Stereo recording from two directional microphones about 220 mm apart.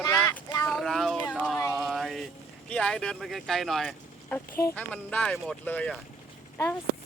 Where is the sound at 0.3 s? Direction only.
15° left (ahead or behind).